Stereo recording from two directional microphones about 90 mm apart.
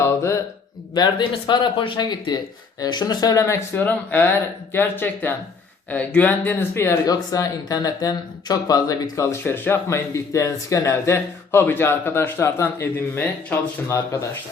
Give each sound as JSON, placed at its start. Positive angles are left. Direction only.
{"t": 0.0, "sound": "mantra", "side_deg": 30}
{"t": 0.9, "sound": "speech", "side_deg": 50}
{"t": 1.3, "sound": "speech", "side_deg": 60}
{"t": 3.8, "sound": "speech", "side_deg": 20}
{"t": 7.1, "sound": "speech", "side_deg": 45}
{"t": 9.4, "sound": "speech", "side_deg": 25}